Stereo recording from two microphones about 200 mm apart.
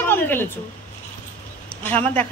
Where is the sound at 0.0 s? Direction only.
10° left (ahead or behind).